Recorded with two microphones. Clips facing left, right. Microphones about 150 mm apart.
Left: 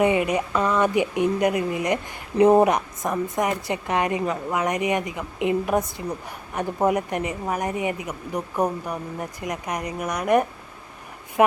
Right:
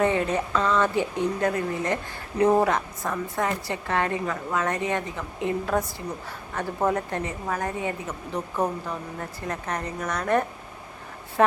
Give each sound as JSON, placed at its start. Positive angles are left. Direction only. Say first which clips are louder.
{"t": 0.0, "sound": "a woman's voice", "louder": "left 3 dB", "side_deg": 15}